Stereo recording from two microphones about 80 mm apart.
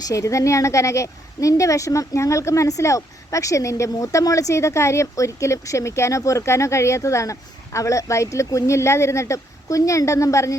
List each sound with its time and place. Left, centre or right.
0.1 s a woman's voice: left